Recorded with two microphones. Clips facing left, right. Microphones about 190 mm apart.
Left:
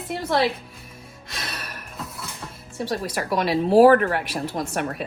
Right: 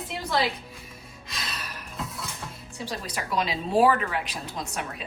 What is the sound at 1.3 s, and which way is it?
Gasp, 60° left (ahead or behind).